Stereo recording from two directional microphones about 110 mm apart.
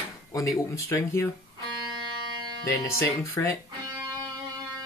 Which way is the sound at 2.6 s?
25° left (ahead or behind).